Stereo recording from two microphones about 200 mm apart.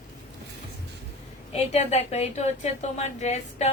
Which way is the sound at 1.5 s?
35° left (ahead or behind).